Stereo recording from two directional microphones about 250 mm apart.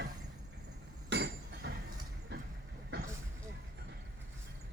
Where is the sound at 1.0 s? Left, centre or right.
Right.